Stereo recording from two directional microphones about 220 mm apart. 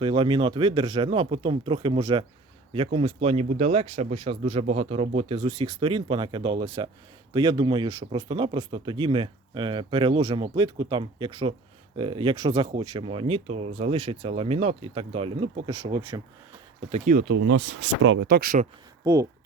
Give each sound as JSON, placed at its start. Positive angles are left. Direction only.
{"t": 0.0, "sound": "speech", "side_deg": -25}
{"t": 16.9, "sound": "speech", "side_deg": -40}
{"t": 17.4, "sound": "speech", "side_deg": -55}
{"t": 19.0, "sound": "speech", "side_deg": -10}